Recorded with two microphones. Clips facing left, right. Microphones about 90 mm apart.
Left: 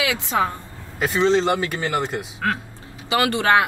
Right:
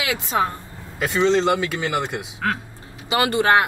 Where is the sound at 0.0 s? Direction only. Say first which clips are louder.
Left 1 dB; 5° right (ahead or behind).